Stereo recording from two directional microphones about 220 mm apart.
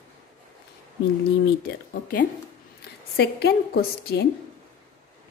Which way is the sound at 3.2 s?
50° left (ahead or behind).